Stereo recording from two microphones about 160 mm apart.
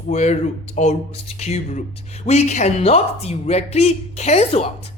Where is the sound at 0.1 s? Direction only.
45° left (ahead or behind).